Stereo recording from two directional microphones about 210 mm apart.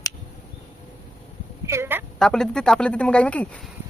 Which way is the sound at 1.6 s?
10° right (ahead or behind).